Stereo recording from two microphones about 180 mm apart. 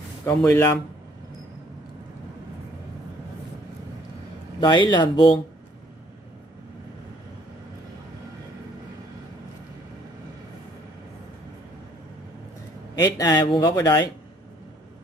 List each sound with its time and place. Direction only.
0.2 s speech: 15° left (ahead or behind)
4.6 s speech: 25° left (ahead or behind)
13.0 s speech: 20° left (ahead or behind)